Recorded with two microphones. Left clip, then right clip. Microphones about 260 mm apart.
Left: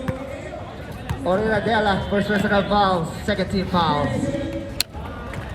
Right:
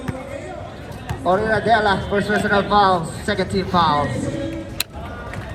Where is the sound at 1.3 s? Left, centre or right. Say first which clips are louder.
Right 4 dB; right.